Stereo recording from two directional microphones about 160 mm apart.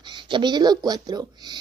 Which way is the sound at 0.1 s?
30° right (ahead or behind).